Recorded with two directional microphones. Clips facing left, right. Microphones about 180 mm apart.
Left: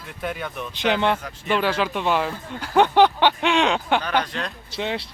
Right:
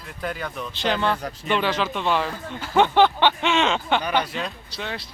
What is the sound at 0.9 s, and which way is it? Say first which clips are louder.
Speech: left 2 dB; 20° left (ahead or behind).